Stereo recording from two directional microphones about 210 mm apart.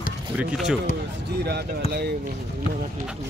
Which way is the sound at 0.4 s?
5° right (ahead or behind).